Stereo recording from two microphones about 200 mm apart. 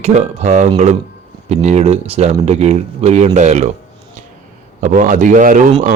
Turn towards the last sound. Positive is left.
turn(degrees=-40)  # may be behind; listen again after turning